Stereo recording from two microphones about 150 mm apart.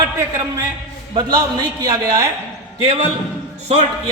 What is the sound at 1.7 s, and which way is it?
Speech, 25° right (ahead or behind).